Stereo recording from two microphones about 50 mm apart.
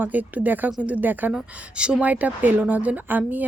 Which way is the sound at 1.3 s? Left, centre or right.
Centre.